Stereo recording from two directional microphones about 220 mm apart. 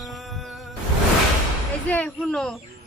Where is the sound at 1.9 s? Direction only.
5° left (ahead or behind).